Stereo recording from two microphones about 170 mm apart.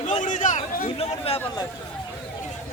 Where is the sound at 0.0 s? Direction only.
45° left (ahead or behind).